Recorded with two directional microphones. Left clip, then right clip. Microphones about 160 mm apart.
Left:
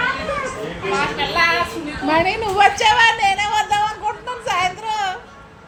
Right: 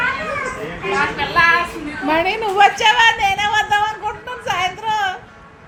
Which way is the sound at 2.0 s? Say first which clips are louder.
Even; 5° right (ahead or behind).